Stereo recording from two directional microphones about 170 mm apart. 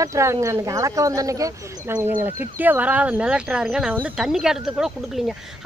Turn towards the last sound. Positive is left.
turn(degrees=0)  # may be behind; listen again after turning